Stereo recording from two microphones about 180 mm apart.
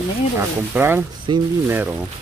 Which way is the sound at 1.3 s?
25° right (ahead or behind).